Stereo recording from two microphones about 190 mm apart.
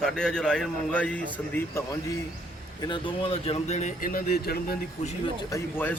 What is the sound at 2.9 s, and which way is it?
Speech, 30° left (ahead or behind).